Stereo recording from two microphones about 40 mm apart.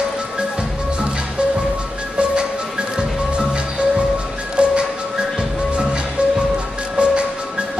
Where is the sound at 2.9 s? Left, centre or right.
Right.